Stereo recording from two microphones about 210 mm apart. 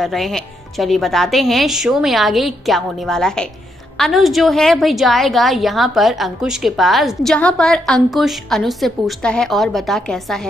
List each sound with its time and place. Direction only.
0.0 s a woman's voice: centre (ahead or behind)